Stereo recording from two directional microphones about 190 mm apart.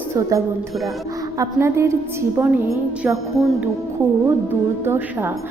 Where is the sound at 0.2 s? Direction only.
15° right (ahead or behind).